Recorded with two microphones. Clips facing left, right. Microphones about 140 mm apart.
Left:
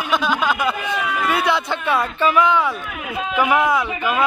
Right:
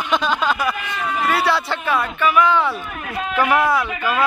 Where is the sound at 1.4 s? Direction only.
20° left (ahead or behind).